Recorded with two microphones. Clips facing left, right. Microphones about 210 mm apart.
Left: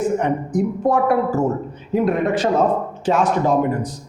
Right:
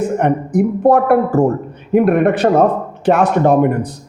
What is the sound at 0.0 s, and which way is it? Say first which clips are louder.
Speech: right 3 dB; 60° right (ahead or behind).